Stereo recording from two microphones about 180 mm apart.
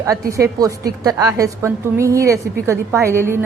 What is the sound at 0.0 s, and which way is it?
A woman's voice, 15° right (ahead or behind).